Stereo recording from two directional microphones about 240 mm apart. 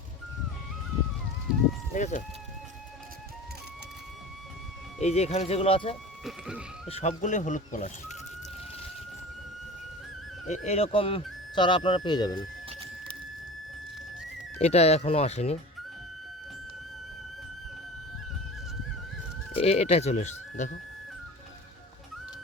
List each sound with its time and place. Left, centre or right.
2.0 s speech: left
4.9 s speech: left
6.2 s speech: centre
6.8 s speech: left
10.5 s speech: left
14.6 s speech: left
19.5 s speech: left